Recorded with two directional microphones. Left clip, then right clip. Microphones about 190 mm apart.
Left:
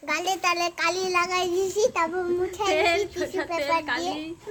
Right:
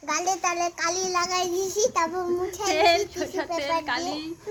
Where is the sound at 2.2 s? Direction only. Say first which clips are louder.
Left 1 dB; 30° left (ahead or behind).